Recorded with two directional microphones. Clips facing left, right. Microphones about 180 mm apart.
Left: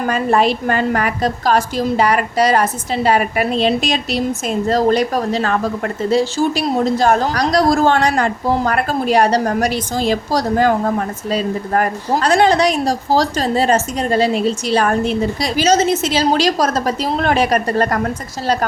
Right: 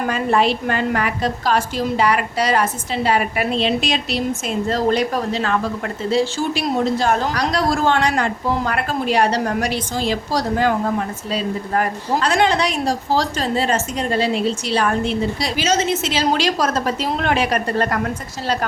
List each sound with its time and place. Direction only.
0.1 s a woman's voice: 45° left (ahead or behind)